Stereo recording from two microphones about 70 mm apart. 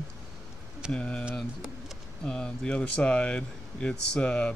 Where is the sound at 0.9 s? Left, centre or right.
Centre.